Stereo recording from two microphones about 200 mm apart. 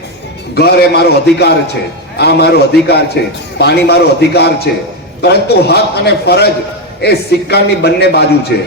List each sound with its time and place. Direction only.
0.5 s a man's voice: 55° left (ahead or behind)